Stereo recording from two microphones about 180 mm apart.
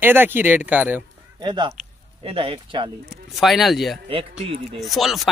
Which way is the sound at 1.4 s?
25° right (ahead or behind).